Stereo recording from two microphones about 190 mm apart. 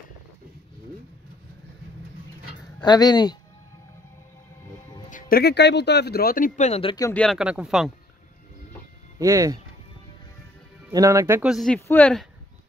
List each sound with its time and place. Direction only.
2.8 s speech: 20° left (ahead or behind)
5.1 s speech: 55° left (ahead or behind); by 7.1 s 25° left (ahead or behind)
7.1 s speech: 5° left (ahead or behind)
9.2 s speech: 15° right (ahead or behind)
10.9 s speech: 15° right (ahead or behind); by 12.3 s 5° left (ahead or behind)